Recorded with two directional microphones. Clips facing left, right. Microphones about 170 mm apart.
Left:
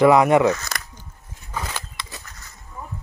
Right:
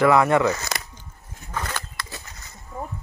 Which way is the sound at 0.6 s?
25° right (ahead or behind).